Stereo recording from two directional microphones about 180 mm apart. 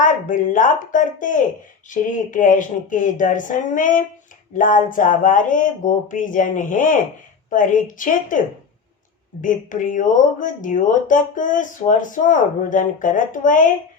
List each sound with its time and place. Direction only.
0.0 s speech: 45° left (ahead or behind)
9.4 s speech: 45° left (ahead or behind)